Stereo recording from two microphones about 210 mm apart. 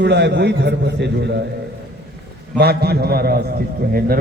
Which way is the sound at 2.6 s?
50° right (ahead or behind).